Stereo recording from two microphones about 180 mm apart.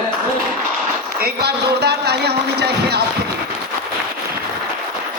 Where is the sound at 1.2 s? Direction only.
65° right (ahead or behind).